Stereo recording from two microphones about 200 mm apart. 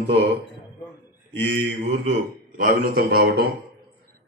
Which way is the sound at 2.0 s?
45° right (ahead or behind).